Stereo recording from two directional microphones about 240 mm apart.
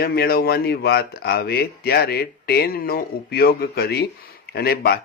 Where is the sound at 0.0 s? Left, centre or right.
Left.